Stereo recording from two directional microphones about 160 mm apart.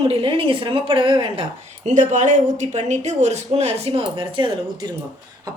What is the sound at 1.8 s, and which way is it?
Speech, 55° right (ahead or behind).